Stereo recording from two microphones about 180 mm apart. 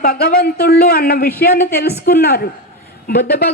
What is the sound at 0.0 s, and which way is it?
A man's voice, 55° left (ahead or behind).